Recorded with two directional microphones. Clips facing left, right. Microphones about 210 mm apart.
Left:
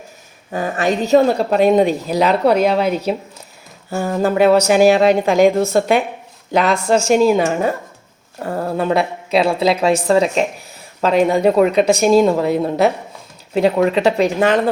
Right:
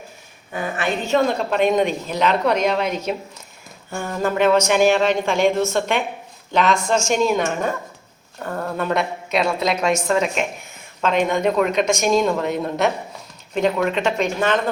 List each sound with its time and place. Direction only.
0.5 s a woman's voice: 40° left (ahead or behind)